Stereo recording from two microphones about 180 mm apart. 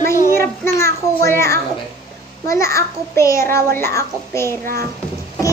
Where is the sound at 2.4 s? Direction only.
15° left (ahead or behind).